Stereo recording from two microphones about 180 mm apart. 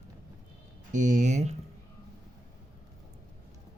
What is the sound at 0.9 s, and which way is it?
Speech, 40° right (ahead or behind).